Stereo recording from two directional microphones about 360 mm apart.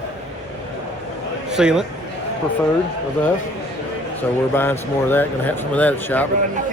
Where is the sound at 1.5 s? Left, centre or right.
Centre.